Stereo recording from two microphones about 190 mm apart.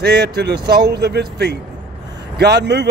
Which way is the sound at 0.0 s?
60° right (ahead or behind).